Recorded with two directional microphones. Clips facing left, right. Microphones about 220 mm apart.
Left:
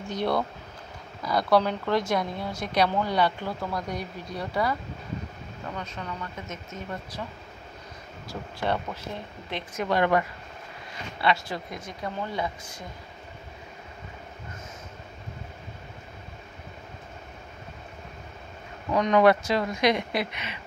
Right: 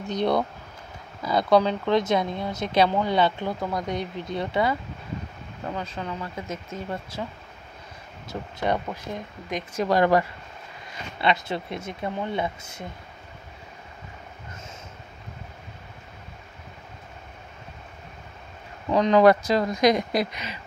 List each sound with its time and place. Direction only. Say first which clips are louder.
0.0 s speech: right 3 dB; 20° right (ahead or behind)
5.8 s speech: right 3 dB; 30° right (ahead or behind)
8.3 s speech: right 3 dB; 20° right (ahead or behind)
9.8 s speech: right 3 dB; 35° right (ahead or behind)
11.1 s speech: right 2 dB; 20° right (ahead or behind)
18.9 s speech: right 3 dB; 30° right (ahead or behind)